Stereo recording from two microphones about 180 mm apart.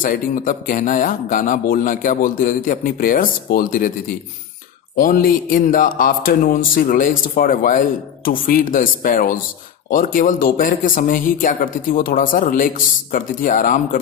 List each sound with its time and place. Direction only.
0.0 s a man's voice: 50° left (ahead or behind)